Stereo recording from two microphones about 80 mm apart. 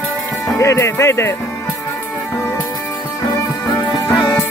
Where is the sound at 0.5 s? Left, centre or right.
Left.